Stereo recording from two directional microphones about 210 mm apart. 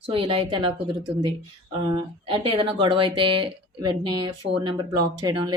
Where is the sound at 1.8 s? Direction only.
20° right (ahead or behind).